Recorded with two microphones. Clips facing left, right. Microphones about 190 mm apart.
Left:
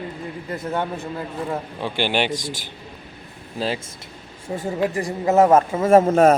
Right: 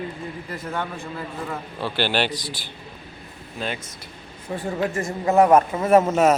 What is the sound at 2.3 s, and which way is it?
A man's voice, 45° left (ahead or behind).